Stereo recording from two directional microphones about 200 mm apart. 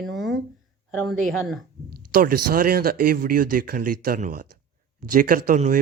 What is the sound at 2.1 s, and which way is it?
Speech, 45° right (ahead or behind).